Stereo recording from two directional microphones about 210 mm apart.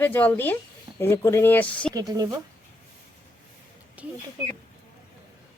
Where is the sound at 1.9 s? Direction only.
15° right (ahead or behind).